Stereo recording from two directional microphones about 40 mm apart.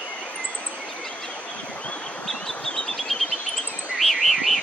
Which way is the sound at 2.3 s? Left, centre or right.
Centre.